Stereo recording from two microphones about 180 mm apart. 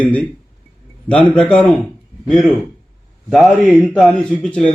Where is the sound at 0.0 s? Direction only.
10° left (ahead or behind).